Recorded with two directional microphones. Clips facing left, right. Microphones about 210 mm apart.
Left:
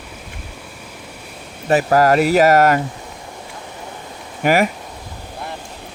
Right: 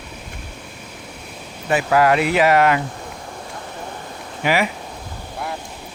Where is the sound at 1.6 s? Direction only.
40° left (ahead or behind).